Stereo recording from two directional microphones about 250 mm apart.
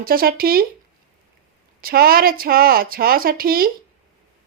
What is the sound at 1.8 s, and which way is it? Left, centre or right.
A woman's voice, right.